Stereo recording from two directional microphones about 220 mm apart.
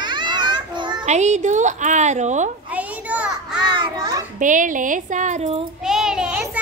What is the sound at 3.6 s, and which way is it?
Children playing, 15° right (ahead or behind).